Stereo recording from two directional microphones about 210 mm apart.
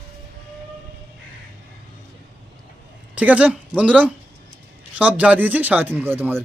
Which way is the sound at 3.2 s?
5° right (ahead or behind).